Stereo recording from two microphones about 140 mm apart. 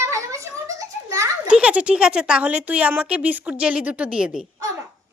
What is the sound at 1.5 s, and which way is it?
Speech, 10° right (ahead or behind).